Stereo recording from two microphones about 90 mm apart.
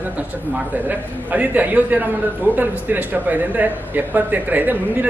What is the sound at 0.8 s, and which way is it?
A man's voice, 20° right (ahead or behind).